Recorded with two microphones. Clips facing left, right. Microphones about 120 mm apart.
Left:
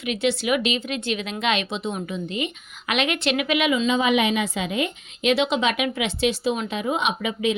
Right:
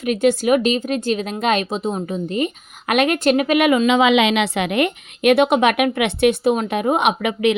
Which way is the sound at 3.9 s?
90° right.